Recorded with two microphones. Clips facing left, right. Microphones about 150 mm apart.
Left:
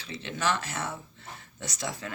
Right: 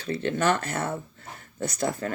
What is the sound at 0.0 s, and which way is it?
Speech, 50° right (ahead or behind).